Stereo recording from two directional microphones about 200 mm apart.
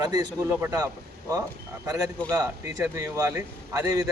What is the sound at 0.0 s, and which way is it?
Speech, 20° right (ahead or behind).